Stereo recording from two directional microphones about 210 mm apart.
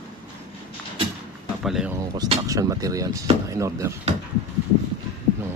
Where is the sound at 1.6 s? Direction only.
5° right (ahead or behind).